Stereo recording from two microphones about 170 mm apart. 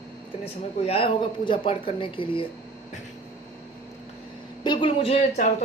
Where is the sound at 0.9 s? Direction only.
30° left (ahead or behind).